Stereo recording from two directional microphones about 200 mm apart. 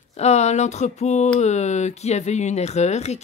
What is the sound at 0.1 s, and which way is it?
Speech, 35° left (ahead or behind).